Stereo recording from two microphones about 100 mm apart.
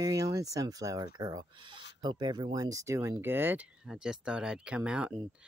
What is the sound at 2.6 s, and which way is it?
Speech, 30° right (ahead or behind).